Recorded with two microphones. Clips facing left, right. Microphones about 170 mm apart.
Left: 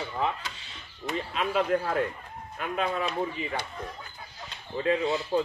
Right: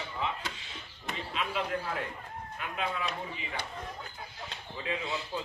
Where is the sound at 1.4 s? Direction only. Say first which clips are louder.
Left 7 dB; 45° left (ahead or behind).